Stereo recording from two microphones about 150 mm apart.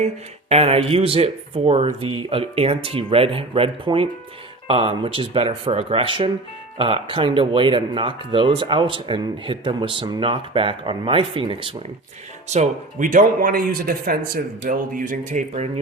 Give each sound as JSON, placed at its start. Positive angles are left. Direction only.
{"t": 0.0, "sound": "speech", "side_deg": -45}
{"t": 12.5, "sound": "speech", "side_deg": -55}